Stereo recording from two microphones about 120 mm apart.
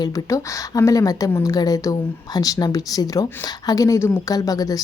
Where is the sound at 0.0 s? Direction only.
30° left (ahead or behind).